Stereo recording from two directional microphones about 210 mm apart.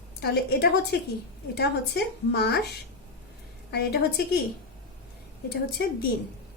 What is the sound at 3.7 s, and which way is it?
Speech, 50° left (ahead or behind).